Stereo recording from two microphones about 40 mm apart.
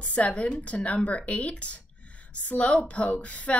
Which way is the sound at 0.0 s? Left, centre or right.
Left.